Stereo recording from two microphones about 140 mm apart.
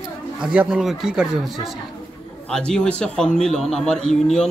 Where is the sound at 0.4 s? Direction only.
5° right (ahead or behind).